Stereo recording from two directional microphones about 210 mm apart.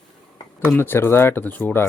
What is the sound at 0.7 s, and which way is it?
Speech, 10° left (ahead or behind).